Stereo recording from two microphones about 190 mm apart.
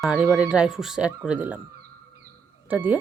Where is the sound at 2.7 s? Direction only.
10° right (ahead or behind).